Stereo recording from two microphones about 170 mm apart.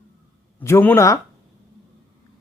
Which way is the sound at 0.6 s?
15° left (ahead or behind).